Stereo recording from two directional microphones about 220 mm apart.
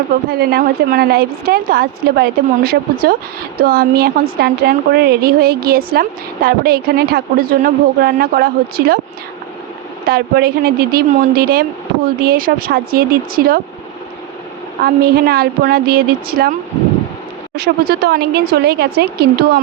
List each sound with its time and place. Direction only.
0.3 s a woman's voice: 45° right (ahead or behind)
10.1 s a woman's voice: 45° right (ahead or behind)
14.8 s a woman's voice: 45° right (ahead or behind)